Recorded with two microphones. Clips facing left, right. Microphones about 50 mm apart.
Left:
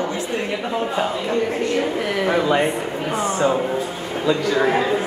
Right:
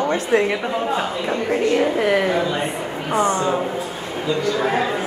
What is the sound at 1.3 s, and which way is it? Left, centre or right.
Speech, centre.